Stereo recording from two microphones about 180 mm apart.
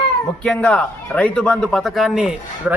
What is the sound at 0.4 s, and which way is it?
A man's voice, 5° left (ahead or behind).